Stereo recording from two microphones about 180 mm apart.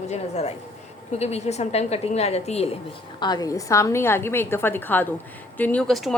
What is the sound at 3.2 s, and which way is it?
A woman's voice, 25° left (ahead or behind).